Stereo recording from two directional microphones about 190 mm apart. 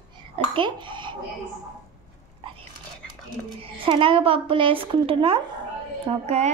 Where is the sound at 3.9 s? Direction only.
25° right (ahead or behind).